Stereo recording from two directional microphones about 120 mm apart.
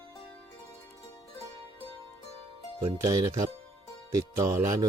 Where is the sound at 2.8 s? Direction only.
30° right (ahead or behind).